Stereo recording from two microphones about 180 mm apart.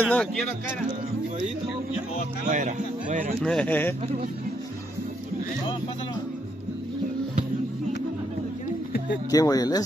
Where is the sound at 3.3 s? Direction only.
5° left (ahead or behind).